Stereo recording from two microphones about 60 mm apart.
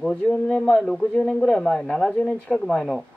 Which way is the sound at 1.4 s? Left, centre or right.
Centre.